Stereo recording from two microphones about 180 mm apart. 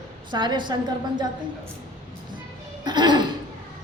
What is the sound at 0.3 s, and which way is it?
Speech, 25° right (ahead or behind).